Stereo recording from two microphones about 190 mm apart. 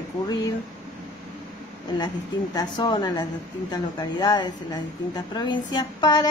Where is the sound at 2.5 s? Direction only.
20° left (ahead or behind).